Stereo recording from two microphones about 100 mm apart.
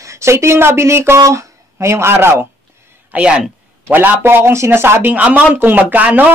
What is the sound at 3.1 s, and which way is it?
A man's voice, 10° right (ahead or behind).